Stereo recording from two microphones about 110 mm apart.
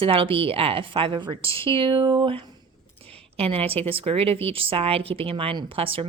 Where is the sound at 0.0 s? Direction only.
55° right (ahead or behind).